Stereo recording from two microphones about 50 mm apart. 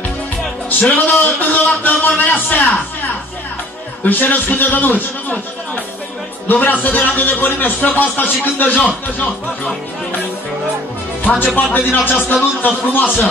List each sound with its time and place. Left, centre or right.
0.7 s a man's voice: left
6.4 s a man's voice: left
11.5 s a man's voice: left